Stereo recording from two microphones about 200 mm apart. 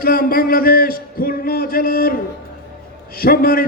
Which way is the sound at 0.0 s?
45° left (ahead or behind).